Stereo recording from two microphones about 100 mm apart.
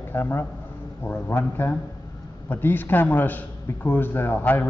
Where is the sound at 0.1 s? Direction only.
25° left (ahead or behind).